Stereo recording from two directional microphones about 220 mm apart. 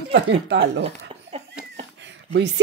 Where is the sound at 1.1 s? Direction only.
30° right (ahead or behind).